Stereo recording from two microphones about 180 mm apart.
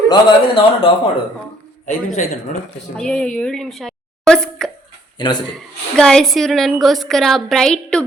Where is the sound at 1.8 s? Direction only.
40° left (ahead or behind).